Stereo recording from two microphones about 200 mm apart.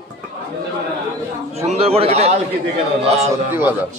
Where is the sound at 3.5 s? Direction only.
10° right (ahead or behind).